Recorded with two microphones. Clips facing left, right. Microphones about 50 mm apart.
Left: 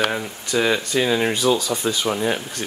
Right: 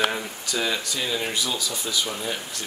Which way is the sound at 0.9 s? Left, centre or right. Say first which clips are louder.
Left 8 dB; left.